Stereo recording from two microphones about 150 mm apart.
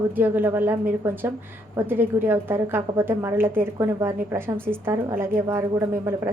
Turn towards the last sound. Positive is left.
turn(degrees=-15)  # may be behind; listen again after turning